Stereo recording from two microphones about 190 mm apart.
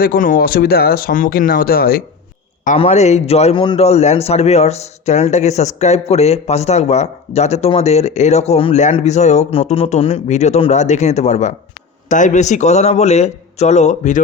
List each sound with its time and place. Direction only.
0.0 s speech: 45° left (ahead or behind)
2.6 s a man's voice: 35° left (ahead or behind)